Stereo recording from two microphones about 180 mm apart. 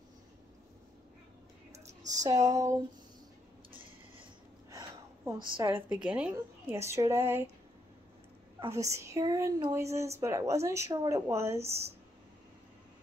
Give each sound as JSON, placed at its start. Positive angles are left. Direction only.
{"t": 1.9, "sound": "speech", "side_deg": -20}
{"t": 4.6, "sound": "a sound", "side_deg": -15}
{"t": 5.4, "sound": "a woman's voice", "side_deg": -25}
{"t": 5.8, "sound": "a woman's voice", "side_deg": -10}
{"t": 8.6, "sound": "a woman's voice", "side_deg": -15}